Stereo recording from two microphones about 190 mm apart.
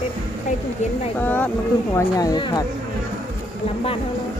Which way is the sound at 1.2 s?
10° left (ahead or behind).